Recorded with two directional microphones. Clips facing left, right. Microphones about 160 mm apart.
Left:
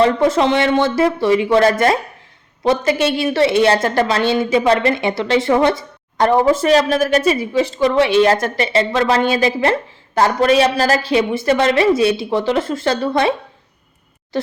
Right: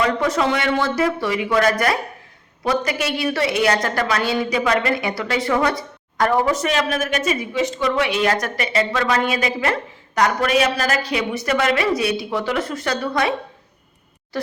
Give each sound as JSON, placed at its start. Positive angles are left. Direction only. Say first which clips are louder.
{"t": 0.0, "sound": "a woman's voice", "louder": "left 6 dB", "side_deg": 30}
{"t": 14.3, "sound": "speech", "louder": "left 4 dB", "side_deg": 25}